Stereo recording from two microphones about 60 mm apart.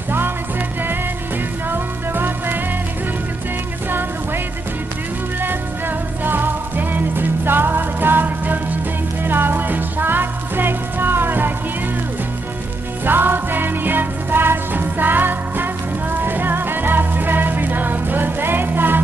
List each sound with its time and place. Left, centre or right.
1.7 s music: right
5.4 s music: right
13.0 s music: right